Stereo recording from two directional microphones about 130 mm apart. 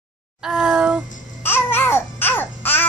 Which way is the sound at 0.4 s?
5° right (ahead or behind).